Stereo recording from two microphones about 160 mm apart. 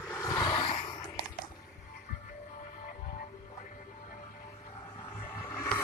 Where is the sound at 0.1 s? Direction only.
20° left (ahead or behind).